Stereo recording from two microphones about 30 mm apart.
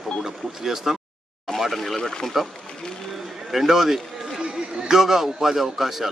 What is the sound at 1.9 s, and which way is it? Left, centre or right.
Speech, centre.